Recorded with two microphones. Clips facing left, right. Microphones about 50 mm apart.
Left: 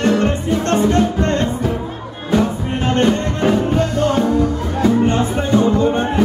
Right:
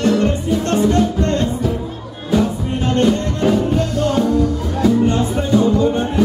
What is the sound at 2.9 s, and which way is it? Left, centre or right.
Music, centre.